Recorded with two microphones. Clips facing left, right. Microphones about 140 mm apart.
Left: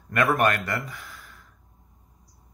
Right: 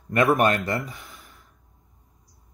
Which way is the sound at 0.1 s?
25° right (ahead or behind).